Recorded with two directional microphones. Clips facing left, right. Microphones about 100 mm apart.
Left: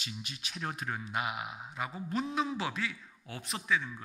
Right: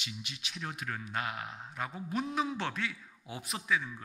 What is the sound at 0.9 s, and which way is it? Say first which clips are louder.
A man's voice: even; 20° left (ahead or behind).